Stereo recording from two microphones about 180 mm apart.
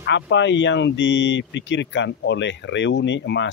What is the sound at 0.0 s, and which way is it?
Speech, 85° left.